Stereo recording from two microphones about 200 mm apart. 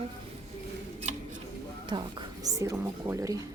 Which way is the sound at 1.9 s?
20° right (ahead or behind).